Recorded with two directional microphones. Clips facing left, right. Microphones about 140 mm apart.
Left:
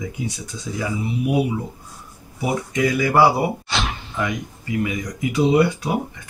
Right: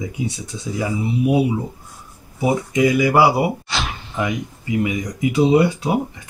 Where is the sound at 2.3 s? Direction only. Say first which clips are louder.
Right 4 dB; 20° right (ahead or behind).